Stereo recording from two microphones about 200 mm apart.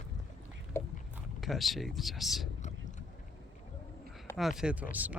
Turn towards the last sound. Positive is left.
turn(degrees=-10)  # may be behind; listen again after turning